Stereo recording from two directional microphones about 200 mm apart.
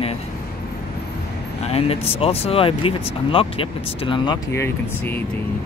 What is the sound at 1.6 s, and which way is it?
Speech, 30° left (ahead or behind).